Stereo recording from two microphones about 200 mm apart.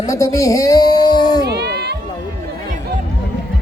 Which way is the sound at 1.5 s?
55° right (ahead or behind).